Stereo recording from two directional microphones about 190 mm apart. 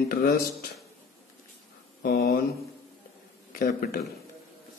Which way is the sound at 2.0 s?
55° left (ahead or behind).